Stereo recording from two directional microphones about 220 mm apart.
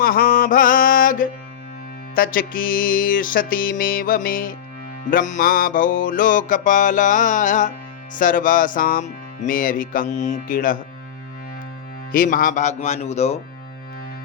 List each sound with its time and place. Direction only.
0.0 s mantra: 40° left (ahead or behind)
2.1 s speech: 40° left (ahead or behind)
12.1 s speech: 40° left (ahead or behind)